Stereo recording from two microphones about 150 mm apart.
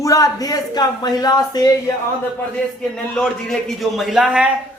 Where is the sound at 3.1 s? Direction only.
5° left (ahead or behind).